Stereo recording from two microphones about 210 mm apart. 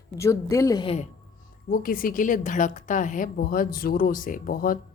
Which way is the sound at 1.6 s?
45° left (ahead or behind).